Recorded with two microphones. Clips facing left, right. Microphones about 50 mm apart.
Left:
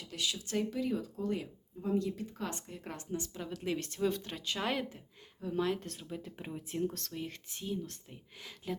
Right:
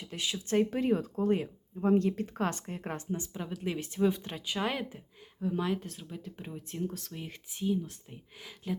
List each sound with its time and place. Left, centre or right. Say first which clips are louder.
0.0 s speech: right 2 dB; right; by 6.9 s centre
6.9 s speech: left 1 dB; centre